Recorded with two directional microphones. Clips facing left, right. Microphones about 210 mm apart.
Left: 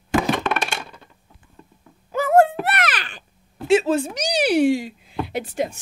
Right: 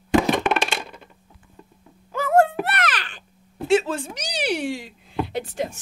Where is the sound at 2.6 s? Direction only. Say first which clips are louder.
Left 2 dB; 10° left (ahead or behind).